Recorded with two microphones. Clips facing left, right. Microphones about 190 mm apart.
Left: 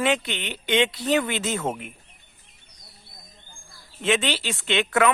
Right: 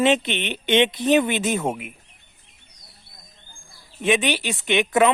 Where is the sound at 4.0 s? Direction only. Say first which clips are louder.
Right 3 dB; 15° right (ahead or behind).